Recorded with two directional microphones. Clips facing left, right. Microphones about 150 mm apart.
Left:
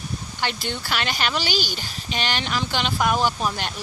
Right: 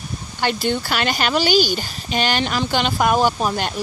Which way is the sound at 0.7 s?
45° right (ahead or behind).